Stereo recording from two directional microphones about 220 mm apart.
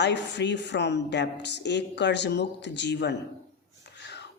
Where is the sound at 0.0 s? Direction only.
50° left (ahead or behind).